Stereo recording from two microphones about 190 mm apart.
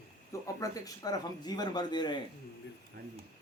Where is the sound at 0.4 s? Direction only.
20° left (ahead or behind).